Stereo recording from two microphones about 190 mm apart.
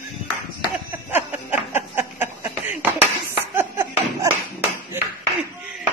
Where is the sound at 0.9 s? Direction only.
10° right (ahead or behind).